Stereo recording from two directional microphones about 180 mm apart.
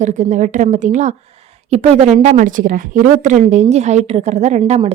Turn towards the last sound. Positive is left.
turn(degrees=-35)  # may be behind; listen again after turning